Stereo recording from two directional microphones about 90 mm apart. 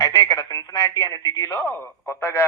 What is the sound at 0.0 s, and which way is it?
Radio, 40° left (ahead or behind).